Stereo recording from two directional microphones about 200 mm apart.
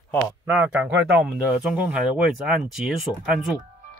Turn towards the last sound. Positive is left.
turn(degrees=0)  # may be behind; listen again after turning